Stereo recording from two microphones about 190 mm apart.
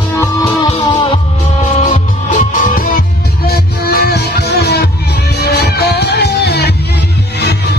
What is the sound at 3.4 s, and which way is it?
Music, 55° left (ahead or behind).